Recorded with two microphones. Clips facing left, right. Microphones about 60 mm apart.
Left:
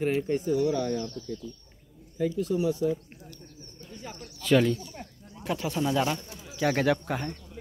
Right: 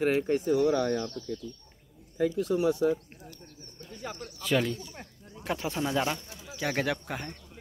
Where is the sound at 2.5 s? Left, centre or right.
Right.